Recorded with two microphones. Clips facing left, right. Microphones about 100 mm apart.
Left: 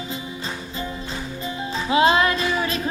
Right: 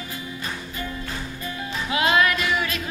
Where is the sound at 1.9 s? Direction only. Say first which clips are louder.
Left 3 dB; 30° left (ahead or behind).